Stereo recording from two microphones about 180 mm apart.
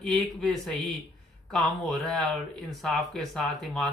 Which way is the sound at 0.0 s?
Centre (ahead or behind).